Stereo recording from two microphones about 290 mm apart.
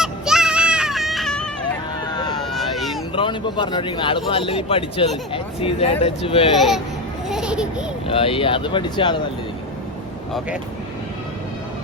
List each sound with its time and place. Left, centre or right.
0.0 s music: centre
2.5 s baby cry: centre
3.1 s speech: centre
6.6 s speech: centre
7.3 s a sound: centre
8.0 s speech: centre